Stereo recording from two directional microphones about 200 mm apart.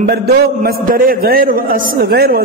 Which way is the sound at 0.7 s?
45° right (ahead or behind).